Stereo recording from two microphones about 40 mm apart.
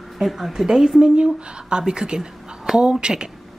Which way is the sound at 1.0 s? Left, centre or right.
Right.